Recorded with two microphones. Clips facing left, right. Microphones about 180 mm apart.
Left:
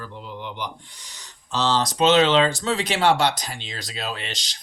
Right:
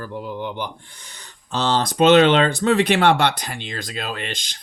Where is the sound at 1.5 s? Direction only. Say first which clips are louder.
Right 1 dB; 55° right (ahead or behind).